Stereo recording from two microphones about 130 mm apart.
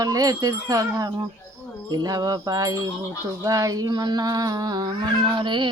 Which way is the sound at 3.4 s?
25° right (ahead or behind).